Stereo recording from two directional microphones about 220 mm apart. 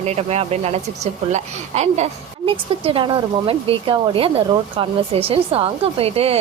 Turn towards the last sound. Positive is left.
turn(degrees=-25)  # may be behind; listen again after turning